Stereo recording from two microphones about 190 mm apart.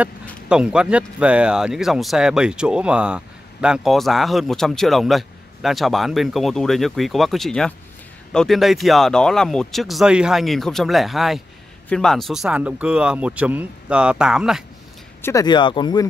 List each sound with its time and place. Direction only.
0.5 s speech: 5° right (ahead or behind)
15.2 s speech: 20° left (ahead or behind)